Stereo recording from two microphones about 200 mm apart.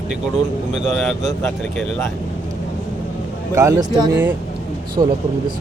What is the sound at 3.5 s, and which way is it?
Speech, 15° right (ahead or behind).